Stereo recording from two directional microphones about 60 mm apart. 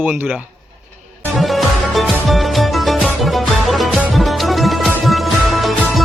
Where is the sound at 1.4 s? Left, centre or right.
Centre.